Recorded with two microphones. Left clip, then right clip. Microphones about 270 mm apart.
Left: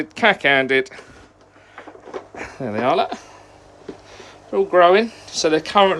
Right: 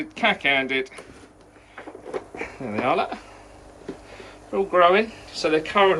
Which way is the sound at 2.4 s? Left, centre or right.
Centre.